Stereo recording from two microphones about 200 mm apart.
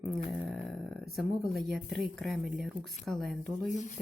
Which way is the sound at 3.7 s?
35° left (ahead or behind).